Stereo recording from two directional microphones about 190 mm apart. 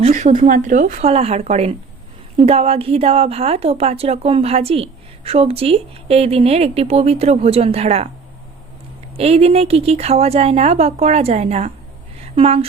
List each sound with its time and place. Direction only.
0.1 s a woman's voice: 40° right (ahead or behind)
9.1 s a woman's voice: 30° right (ahead or behind)